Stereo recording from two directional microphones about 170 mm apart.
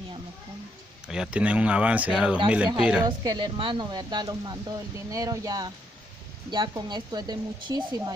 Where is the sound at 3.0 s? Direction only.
25° right (ahead or behind).